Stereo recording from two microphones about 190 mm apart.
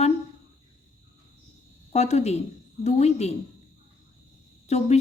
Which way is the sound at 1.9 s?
35° left (ahead or behind).